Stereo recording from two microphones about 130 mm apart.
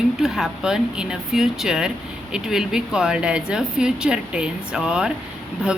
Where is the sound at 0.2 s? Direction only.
5° right (ahead or behind).